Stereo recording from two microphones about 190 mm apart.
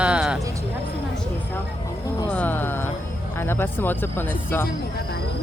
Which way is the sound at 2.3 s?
10° left (ahead or behind).